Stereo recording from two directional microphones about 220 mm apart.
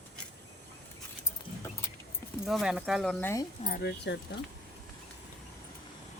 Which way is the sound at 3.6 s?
40° left (ahead or behind).